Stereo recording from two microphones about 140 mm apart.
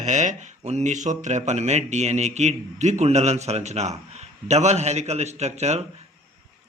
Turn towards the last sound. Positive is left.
turn(degrees=-50)  # may be behind; listen again after turning